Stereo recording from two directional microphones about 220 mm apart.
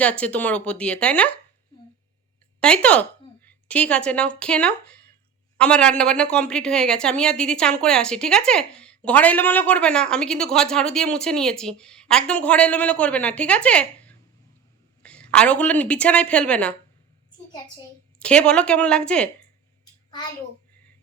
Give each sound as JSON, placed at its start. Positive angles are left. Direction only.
{"t": 0.0, "sound": "a woman's voice", "side_deg": 5}
{"t": 2.6, "sound": "a woman's voice", "side_deg": 5}
{"t": 18.2, "sound": "a woman's voice", "side_deg": 5}
{"t": 19.8, "sound": "a sound", "side_deg": 20}